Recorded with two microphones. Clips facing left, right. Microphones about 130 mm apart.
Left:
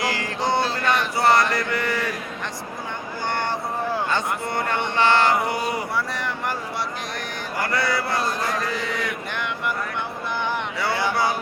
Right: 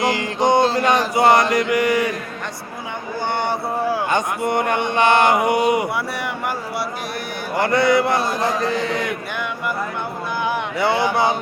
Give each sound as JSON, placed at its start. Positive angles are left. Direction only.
{"t": 0.0, "sound": "music", "side_deg": -20}
{"t": 1.1, "sound": "mantra", "side_deg": -20}
{"t": 3.2, "sound": "a sound", "side_deg": -15}
{"t": 4.4, "sound": "mantra", "side_deg": -15}
{"t": 7.6, "sound": "mantra", "side_deg": -20}
{"t": 10.8, "sound": "mantra", "side_deg": -25}